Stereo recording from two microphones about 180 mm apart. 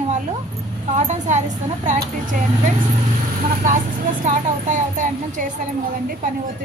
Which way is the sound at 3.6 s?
45° right (ahead or behind).